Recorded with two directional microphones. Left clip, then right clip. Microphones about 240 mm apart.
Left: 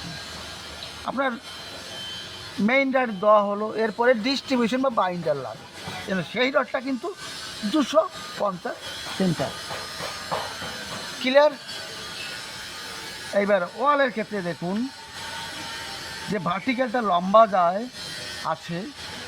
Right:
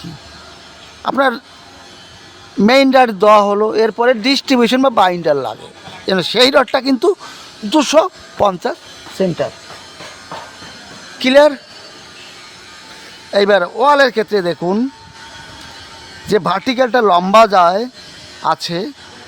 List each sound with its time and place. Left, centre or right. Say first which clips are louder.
1.0 s speech: right 12 dB; right
2.6 s speech: right 12 dB; right
11.2 s speech: right 9 dB; right
13.3 s speech: right 10 dB; right
16.3 s speech: right 12 dB; right